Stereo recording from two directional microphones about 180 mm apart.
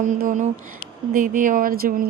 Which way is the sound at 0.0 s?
50° right (ahead or behind).